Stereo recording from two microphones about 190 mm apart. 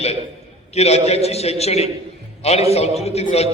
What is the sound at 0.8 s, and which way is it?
A man's voice, 35° left (ahead or behind).